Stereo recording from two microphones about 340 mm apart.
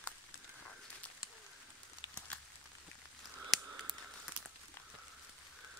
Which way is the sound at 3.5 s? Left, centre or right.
Centre.